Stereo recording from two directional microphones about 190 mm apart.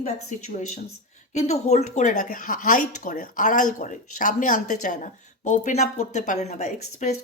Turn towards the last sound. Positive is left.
turn(degrees=35)  # may be behind; listen again after turning